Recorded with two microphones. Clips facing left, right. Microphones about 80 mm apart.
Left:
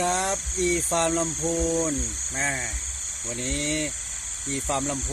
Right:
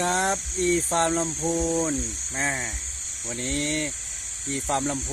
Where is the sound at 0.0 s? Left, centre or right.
Right.